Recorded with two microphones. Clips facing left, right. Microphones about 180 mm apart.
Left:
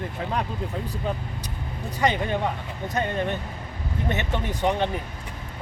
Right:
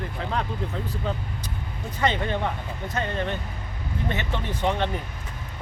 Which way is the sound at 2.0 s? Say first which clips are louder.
Left 1 dB; 15° left (ahead or behind).